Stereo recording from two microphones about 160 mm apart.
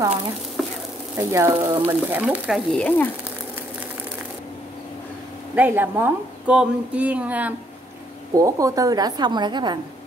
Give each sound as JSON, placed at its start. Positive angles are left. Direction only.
{"t": 1.1, "sound": "speech", "side_deg": -20}
{"t": 2.7, "sound": "speech", "side_deg": 5}
{"t": 5.5, "sound": "speech", "side_deg": -10}
{"t": 8.4, "sound": "a woman's voice", "side_deg": -20}